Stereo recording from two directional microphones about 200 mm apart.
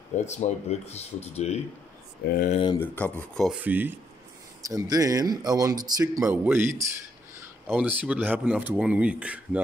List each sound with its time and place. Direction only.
0.1 s speech: 35° left (ahead or behind)
2.2 s speech: 45° left (ahead or behind)
2.5 s speech: 25° left (ahead or behind)
2.8 s speech: 5° left (ahead or behind)
3.6 s speech: 10° right (ahead or behind)